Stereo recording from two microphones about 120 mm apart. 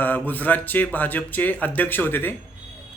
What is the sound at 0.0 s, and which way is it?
A man's voice, 15° left (ahead or behind).